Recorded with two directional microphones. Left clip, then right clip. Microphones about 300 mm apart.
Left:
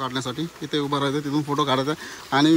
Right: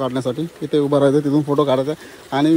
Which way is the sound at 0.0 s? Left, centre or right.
Centre.